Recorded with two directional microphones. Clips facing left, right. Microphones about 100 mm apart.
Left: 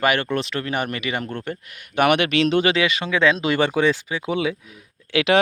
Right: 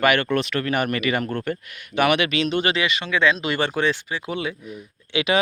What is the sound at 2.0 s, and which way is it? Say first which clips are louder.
Speech: left 2 dB; 55° left (ahead or behind).